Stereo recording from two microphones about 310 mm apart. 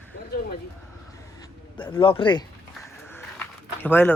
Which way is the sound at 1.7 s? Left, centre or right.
Centre.